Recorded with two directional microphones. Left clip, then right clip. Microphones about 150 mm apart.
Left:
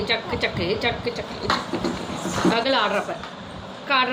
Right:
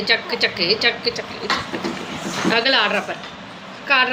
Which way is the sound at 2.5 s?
10° right (ahead or behind).